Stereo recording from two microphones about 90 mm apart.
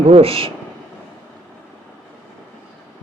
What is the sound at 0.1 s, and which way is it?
Speech, 90° right.